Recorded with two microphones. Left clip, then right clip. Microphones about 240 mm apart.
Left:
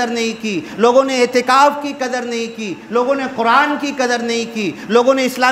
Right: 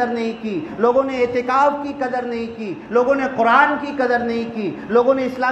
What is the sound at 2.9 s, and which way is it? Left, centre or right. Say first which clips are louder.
A man's voice: even; left.